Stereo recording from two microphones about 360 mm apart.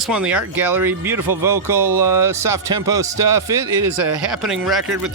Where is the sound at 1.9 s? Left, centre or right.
Right.